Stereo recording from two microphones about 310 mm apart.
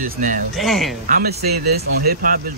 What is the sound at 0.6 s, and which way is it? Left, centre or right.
Speech, centre.